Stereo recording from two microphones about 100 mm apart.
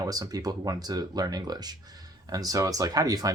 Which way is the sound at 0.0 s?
40° right (ahead or behind).